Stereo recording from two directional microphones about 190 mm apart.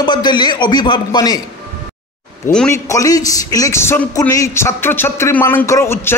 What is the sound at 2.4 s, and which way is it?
A man's voice, 10° left (ahead or behind).